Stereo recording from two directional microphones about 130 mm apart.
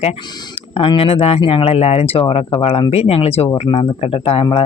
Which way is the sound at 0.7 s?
45° left (ahead or behind).